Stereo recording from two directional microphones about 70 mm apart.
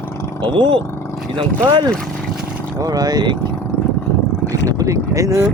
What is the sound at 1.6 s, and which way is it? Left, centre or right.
Speech, right.